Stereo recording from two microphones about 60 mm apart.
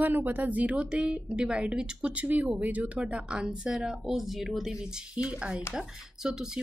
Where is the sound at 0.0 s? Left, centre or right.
Right; by 2.2 s centre.